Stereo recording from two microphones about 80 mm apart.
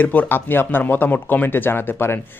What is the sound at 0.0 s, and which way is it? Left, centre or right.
Speech, left.